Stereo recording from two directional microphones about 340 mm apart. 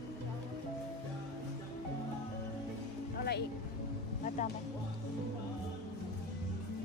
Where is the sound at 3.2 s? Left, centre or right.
Left.